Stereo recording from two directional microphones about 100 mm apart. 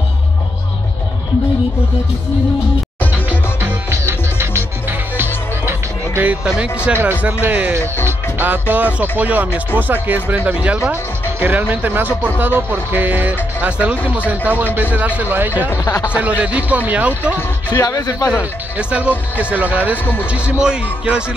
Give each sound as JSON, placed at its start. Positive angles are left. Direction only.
{"t": 3.3, "sound": "music", "side_deg": -25}
{"t": 6.9, "sound": "speech", "side_deg": -20}
{"t": 8.0, "sound": "music", "side_deg": -20}
{"t": 9.2, "sound": "speech", "side_deg": -15}
{"t": 15.7, "sound": "speech", "side_deg": 30}
{"t": 16.1, "sound": "speech", "side_deg": -15}
{"t": 17.7, "sound": "speech", "side_deg": 40}
{"t": 18.4, "sound": "speech", "side_deg": -10}